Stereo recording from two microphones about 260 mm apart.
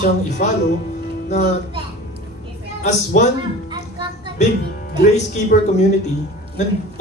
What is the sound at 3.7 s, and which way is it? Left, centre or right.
Music, centre.